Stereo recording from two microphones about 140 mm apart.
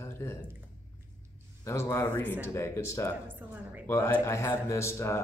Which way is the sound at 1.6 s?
20° left (ahead or behind).